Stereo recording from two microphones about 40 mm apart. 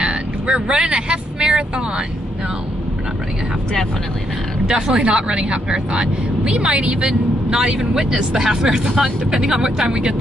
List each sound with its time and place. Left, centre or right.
0.7 s speech: right
4.6 s speech: centre
7.5 s speech: centre